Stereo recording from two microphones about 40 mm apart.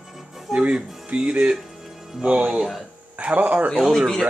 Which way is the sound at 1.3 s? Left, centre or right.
Right.